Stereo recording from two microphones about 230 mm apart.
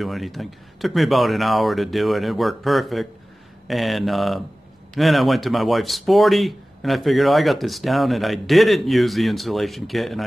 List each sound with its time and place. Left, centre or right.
0.0 s speech: centre